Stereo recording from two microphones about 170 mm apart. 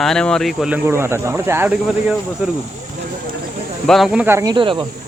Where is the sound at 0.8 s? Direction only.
15° right (ahead or behind).